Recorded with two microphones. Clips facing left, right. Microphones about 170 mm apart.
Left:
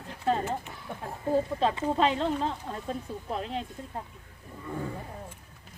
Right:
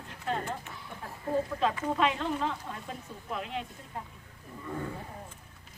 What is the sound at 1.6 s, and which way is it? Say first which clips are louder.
Speech: left 3 dB; 30° left (ahead or behind).